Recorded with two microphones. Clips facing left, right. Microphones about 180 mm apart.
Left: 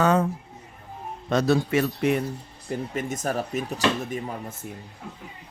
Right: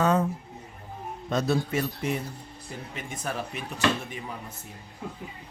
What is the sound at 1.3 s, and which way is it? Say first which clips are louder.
Speech: left 5 dB; 80° left.